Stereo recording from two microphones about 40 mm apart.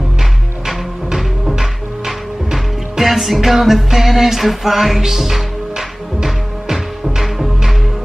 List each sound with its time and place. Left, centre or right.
0.7 s music: centre
7.2 s music: centre